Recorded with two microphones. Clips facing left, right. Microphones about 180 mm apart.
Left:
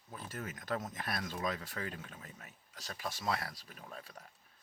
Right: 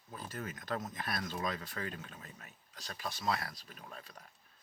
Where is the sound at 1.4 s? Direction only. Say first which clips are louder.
Even; 40° right (ahead or behind).